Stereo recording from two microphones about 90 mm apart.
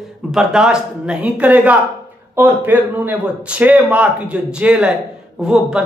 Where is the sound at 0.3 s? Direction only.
5° right (ahead or behind).